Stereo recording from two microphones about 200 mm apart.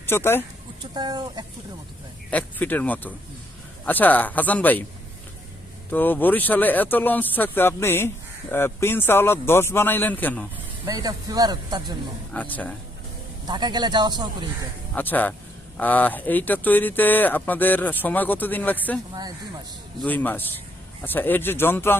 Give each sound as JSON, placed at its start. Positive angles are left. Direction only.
{"t": 0.0, "sound": "speech", "side_deg": 10}
{"t": 0.9, "sound": "speech", "side_deg": -20}
{"t": 2.3, "sound": "speech", "side_deg": 10}
{"t": 5.9, "sound": "speech", "side_deg": 10}
{"t": 10.8, "sound": "speech", "side_deg": -20}
{"t": 12.3, "sound": "speech", "side_deg": 10}
{"t": 13.5, "sound": "speech", "side_deg": -20}
{"t": 14.9, "sound": "speech", "side_deg": 10}
{"t": 20.0, "sound": "speech", "side_deg": 10}